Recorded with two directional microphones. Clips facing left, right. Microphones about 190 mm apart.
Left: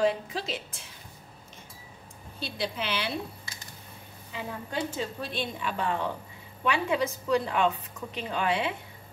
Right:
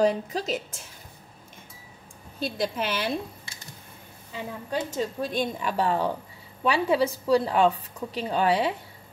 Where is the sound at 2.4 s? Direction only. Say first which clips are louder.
Right 5 dB; 45° right (ahead or behind).